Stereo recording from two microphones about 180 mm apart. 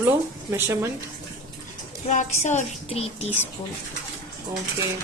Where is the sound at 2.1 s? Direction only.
40° left (ahead or behind).